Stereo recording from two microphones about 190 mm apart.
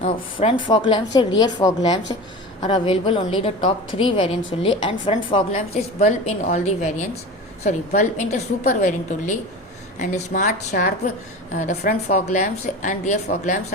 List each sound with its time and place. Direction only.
0.0 s a woman's voice: 30° left (ahead or behind)